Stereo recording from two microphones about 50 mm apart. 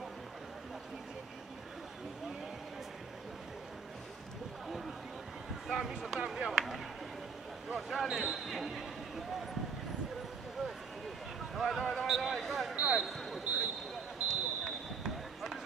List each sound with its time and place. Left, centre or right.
5.7 s speech: centre
11.8 s a man's voice: centre
12.1 s speech: centre
12.7 s speech: right
13.0 s basketball bounce: centre